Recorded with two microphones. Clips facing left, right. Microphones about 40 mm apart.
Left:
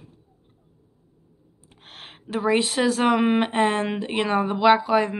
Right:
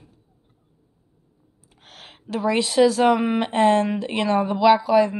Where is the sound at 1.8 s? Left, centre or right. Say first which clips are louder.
Left 2 dB; left.